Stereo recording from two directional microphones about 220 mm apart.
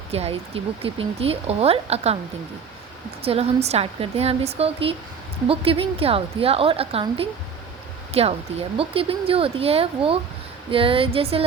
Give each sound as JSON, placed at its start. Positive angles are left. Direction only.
{"t": 0.1, "sound": "speech", "side_deg": -25}
{"t": 3.2, "sound": "speech", "side_deg": -25}